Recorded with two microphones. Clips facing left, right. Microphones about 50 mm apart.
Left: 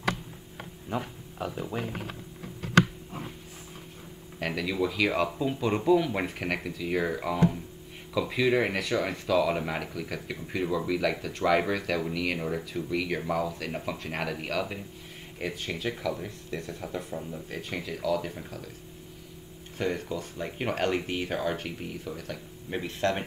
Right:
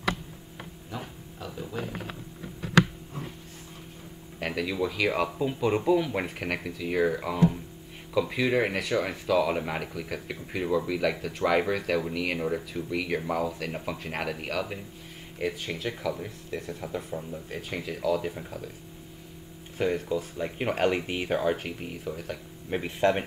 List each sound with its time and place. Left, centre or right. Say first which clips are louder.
0.8 s speech: left 7 dB; left
4.4 s speech: even; centre
19.8 s speech: right 3 dB; centre